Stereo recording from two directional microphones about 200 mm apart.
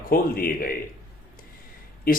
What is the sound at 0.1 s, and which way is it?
Speech, 50° left (ahead or behind).